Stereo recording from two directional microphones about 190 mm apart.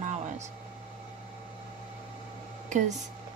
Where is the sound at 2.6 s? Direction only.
40° right (ahead or behind).